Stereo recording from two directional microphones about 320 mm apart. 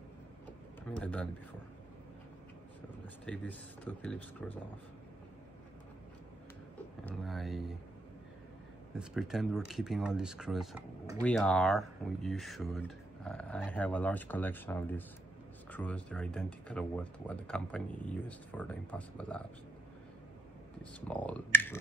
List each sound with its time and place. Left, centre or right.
0.8 s speech: centre
3.3 s speech: centre
7.1 s a sound: centre
8.9 s speech: centre
20.8 s speech: centre